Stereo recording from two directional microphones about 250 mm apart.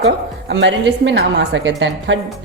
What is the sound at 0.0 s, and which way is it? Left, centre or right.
Speech, right.